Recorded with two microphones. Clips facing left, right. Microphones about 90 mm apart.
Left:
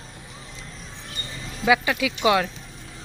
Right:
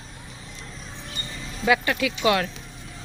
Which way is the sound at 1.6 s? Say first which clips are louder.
Left 1 dB; 10° left (ahead or behind).